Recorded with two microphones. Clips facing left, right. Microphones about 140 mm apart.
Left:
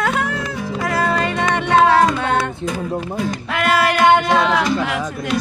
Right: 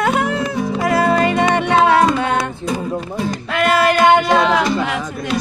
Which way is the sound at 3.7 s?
5° left (ahead or behind).